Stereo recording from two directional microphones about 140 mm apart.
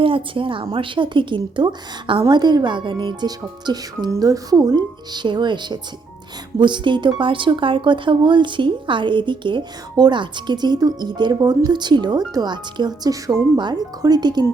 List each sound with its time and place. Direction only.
0.0 s a woman's voice: 40° right (ahead or behind)